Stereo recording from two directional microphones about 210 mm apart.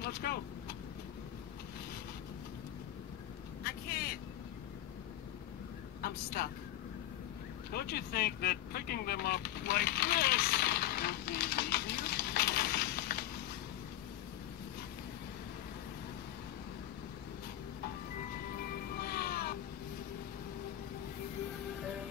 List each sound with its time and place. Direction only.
0.0 s vehicle: 50° left (ahead or behind)
3.6 s vehicle: 45° left (ahead or behind)
7.7 s vehicle: 50° left (ahead or behind)
18.6 s music: 45° left (ahead or behind)